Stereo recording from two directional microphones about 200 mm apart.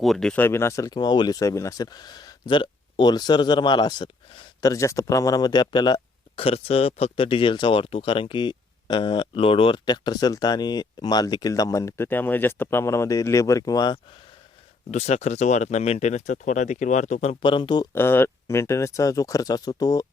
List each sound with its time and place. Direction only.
0.0 s speech: centre (ahead or behind); by 14.0 s 20° left (ahead or behind)
14.8 s speech: 35° left (ahead or behind)
17.9 s speech: 10° left (ahead or behind)